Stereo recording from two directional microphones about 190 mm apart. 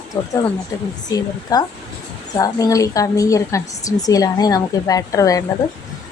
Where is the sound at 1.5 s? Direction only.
20° left (ahead or behind).